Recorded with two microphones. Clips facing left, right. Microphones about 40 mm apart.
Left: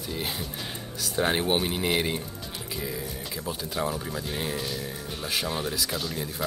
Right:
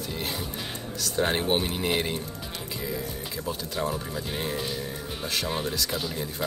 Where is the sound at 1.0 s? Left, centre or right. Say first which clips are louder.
Even; centre.